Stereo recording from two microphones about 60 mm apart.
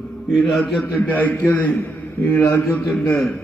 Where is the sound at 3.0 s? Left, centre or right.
Left.